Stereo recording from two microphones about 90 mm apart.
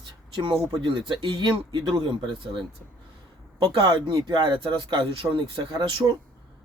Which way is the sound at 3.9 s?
50° right (ahead or behind).